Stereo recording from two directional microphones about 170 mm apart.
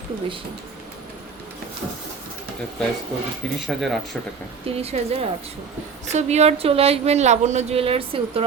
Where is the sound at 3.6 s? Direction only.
Centre (ahead or behind).